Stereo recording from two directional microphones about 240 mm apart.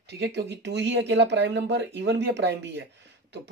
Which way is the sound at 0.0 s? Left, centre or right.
Right.